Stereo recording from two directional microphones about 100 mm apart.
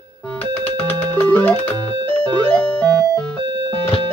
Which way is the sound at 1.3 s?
15° left (ahead or behind).